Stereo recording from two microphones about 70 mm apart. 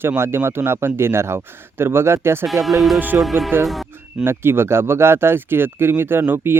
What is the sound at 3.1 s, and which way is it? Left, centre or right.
Speech, centre.